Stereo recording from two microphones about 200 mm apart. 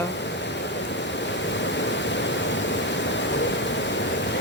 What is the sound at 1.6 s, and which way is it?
Waterfall, 60° left (ahead or behind).